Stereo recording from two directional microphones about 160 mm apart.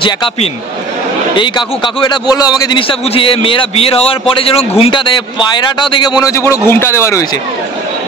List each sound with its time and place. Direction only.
0.0 s a man's voice: 30° left (ahead or behind)